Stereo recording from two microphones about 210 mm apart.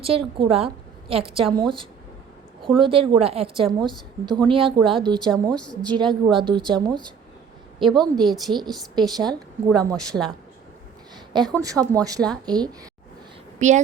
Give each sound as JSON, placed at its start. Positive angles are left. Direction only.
{"t": 0.0, "sound": "a woman's voice", "side_deg": -25}
{"t": 2.6, "sound": "a woman's voice", "side_deg": -25}
{"t": 5.3, "sound": "a woman's voice", "side_deg": 5}
{"t": 5.9, "sound": "a woman's voice", "side_deg": -20}
{"t": 8.2, "sound": "a woman's voice", "side_deg": 0}
{"t": 9.0, "sound": "a woman's voice", "side_deg": -20}
{"t": 9.6, "sound": "a woman's voice", "side_deg": 5}
{"t": 11.3, "sound": "a woman's voice", "side_deg": -20}
{"t": 13.6, "sound": "a woman's voice", "side_deg": -35}